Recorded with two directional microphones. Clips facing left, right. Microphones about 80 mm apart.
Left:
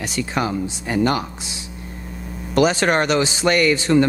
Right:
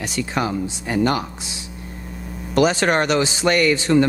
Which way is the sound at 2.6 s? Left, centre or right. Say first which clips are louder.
Even; centre.